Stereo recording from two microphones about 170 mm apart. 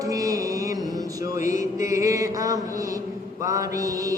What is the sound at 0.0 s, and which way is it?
Music, 20° right (ahead or behind).